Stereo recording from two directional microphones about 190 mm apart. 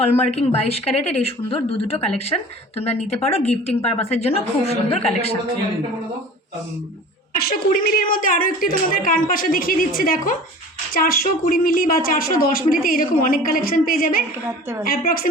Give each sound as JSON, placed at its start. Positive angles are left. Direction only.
{"t": 0.0, "sound": "a woman's voice", "side_deg": 35}
{"t": 7.4, "sound": "speech", "side_deg": 50}
{"t": 14.4, "sound": "a woman's voice", "side_deg": -15}
{"t": 14.8, "sound": "speech", "side_deg": 50}